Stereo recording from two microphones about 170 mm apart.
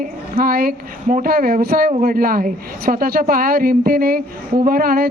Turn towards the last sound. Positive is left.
turn(degrees=-60)  # may be behind; listen again after turning